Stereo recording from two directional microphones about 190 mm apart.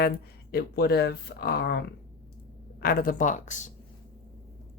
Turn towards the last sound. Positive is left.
turn(degrees=40)  # may be behind; listen again after turning